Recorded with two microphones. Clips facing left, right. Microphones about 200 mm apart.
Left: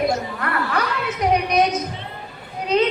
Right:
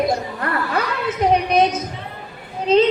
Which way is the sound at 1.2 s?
30° right (ahead or behind).